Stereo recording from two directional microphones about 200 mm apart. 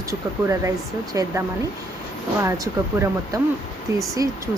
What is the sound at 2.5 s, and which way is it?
Speech, 15° right (ahead or behind).